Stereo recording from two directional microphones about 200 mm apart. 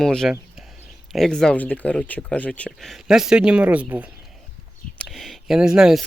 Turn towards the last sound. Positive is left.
turn(degrees=-5)  # may be behind; listen again after turning